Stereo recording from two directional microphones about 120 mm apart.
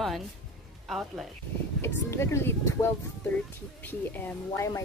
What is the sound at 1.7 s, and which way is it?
Speech, 20° left (ahead or behind).